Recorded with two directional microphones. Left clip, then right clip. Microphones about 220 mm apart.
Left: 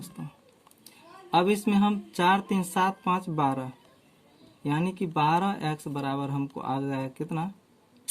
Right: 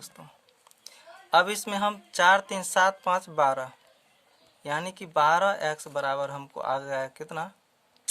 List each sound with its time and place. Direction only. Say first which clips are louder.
0.9 s speech: right 4 dB; 30° right (ahead or behind)